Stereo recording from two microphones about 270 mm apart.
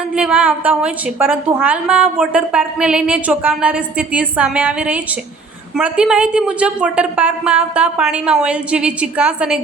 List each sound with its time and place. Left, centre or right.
0.1 s a woman's voice: centre